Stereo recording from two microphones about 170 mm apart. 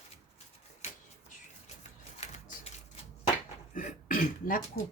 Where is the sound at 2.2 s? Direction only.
40° left (ahead or behind).